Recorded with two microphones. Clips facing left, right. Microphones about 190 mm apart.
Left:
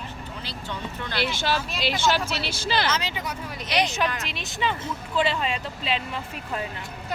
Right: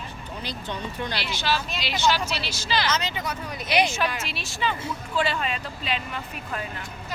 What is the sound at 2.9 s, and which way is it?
Speech, 10° left (ahead or behind).